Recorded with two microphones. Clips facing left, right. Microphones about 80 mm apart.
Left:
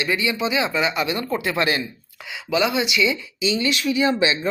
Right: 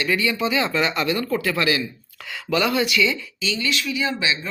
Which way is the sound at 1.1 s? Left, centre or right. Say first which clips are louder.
Right 1 dB; centre.